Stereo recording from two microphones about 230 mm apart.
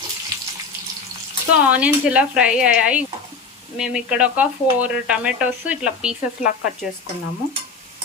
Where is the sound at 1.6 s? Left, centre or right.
Centre.